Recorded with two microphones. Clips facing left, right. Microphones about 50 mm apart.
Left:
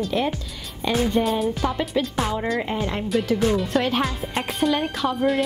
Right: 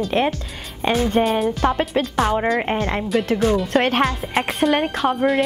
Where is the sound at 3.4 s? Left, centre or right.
Centre.